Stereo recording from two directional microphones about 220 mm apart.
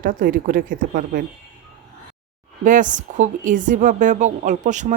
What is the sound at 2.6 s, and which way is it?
A woman's voice, 35° right (ahead or behind).